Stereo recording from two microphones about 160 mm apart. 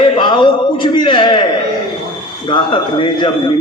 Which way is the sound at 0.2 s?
30° left (ahead or behind).